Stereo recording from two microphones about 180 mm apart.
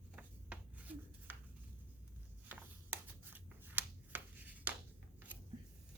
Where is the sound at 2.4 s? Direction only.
10° right (ahead or behind).